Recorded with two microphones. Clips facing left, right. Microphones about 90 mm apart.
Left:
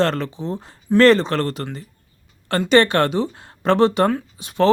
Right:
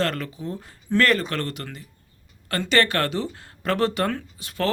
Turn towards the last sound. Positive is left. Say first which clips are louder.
# left 8 dB
turn(degrees=20)  # may be behind; listen again after turning